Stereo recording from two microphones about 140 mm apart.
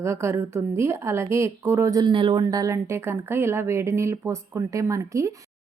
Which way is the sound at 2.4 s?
25° right (ahead or behind).